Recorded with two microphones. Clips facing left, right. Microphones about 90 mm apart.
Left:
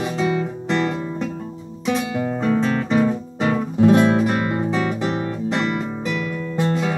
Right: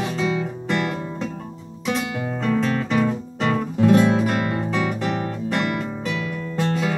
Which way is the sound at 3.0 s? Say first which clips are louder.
Left 2 dB; 15° left (ahead or behind).